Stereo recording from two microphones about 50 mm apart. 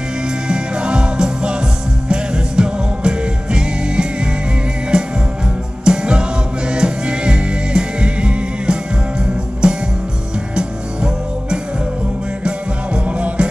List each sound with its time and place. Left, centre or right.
0.5 s music: centre
12.4 s music: right